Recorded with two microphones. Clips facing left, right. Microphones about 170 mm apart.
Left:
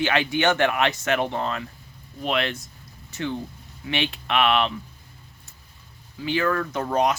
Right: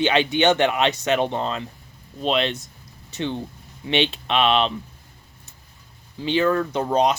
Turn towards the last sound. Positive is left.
turn(degrees=-20)  # may be behind; listen again after turning